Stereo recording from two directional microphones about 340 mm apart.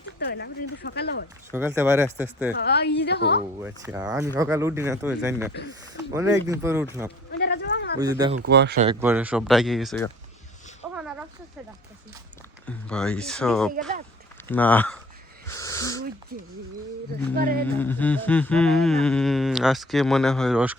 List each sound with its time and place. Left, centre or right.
0.2 s speech: left
1.5 s speech: centre
2.5 s speech: left
3.6 s speech: centre
7.3 s a sound: left
7.9 s speech: centre
8.4 s speech: right
9.0 s humming: centre
10.8 s a sound: centre
12.6 s humming: centre
15.4 s wheeze: centre
16.3 s speech: right
17.6 s humming: centre